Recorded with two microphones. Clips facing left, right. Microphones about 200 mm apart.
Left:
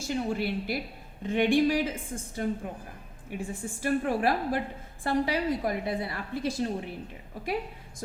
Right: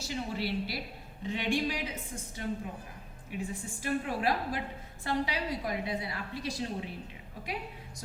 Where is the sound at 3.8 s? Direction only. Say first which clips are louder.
Left 5 dB; 50° left (ahead or behind).